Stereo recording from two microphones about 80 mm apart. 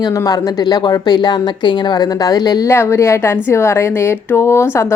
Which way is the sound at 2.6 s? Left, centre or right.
Left.